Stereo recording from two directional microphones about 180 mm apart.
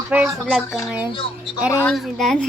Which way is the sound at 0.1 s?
5° right (ahead or behind).